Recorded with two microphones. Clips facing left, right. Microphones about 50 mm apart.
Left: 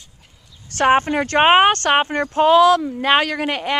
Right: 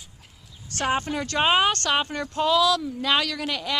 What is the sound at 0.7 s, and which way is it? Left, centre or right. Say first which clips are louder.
Speech: left 10 dB; left.